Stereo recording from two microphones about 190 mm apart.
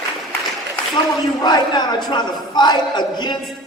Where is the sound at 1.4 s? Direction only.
25° left (ahead or behind).